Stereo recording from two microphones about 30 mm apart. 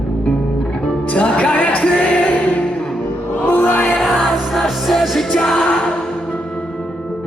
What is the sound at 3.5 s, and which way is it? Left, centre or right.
Music, left.